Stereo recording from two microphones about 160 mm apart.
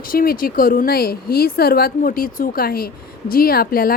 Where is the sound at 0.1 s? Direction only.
65° left (ahead or behind).